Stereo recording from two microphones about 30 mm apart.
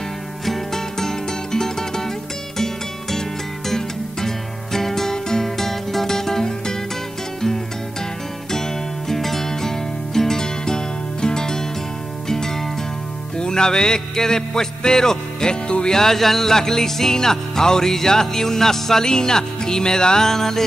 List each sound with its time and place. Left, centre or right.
0.7 s music: centre
9.1 s music: centre
13.4 s speech: left
15.9 s music: centre